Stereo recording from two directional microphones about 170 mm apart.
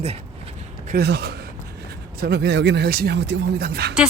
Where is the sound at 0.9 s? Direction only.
70° right (ahead or behind).